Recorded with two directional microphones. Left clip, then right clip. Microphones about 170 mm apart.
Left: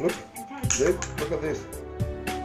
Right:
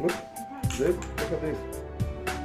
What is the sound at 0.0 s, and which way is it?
Music, centre (ahead or behind).